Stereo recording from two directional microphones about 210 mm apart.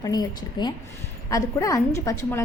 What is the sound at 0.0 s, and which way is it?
A woman's voice, 20° left (ahead or behind).